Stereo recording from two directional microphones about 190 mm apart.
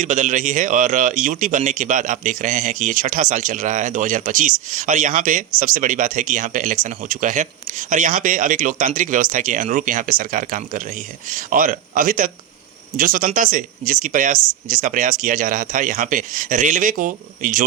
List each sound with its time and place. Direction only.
0.0 s speech: 40° right (ahead or behind)